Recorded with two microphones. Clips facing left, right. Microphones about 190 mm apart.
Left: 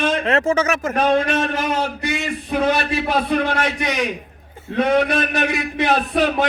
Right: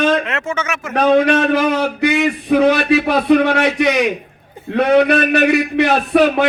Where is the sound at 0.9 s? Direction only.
65° right (ahead or behind).